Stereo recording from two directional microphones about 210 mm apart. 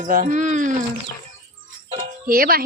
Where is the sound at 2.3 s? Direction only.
45° right (ahead or behind).